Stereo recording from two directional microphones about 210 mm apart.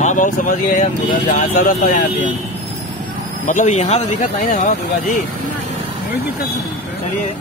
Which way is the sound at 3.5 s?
35° left (ahead or behind).